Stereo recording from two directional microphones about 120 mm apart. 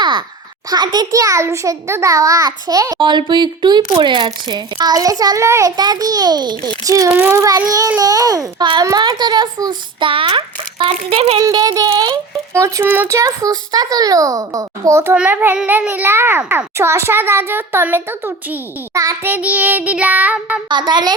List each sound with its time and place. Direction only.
0.0 s a sound: 40° right (ahead or behind)
0.7 s a woman's voice: 35° right (ahead or behind)
7.1 s child singing: 15° right (ahead or behind)
7.3 s a woman's voice: 30° right (ahead or behind); by 10.4 s 45° right (ahead or behind)
11.0 s speech: 55° right (ahead or behind)
11.3 s a woman's voice: 35° right (ahead or behind)
12.5 s speech: 25° right (ahead or behind)
15.1 s child singing: 10° right (ahead or behind)
16.7 s speech: 20° right (ahead or behind)
19.2 s child singing: 15° right (ahead or behind)
20.7 s a woman's voice: 40° right (ahead or behind)